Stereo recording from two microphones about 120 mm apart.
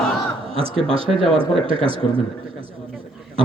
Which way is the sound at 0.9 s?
50° right (ahead or behind).